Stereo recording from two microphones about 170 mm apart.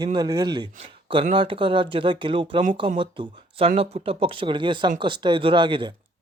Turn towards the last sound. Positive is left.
turn(degrees=-30)  # may be behind; listen again after turning